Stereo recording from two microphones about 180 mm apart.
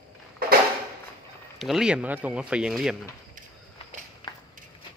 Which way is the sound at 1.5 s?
Centre (ahead or behind).